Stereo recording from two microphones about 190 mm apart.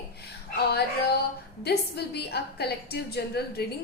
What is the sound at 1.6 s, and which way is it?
A woman's voice, 60° left (ahead or behind).